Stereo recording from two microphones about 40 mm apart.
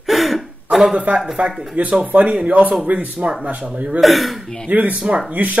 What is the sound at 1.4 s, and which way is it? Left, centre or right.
Speech, right.